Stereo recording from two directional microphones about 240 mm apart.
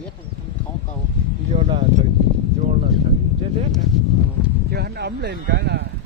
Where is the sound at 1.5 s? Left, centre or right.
Right.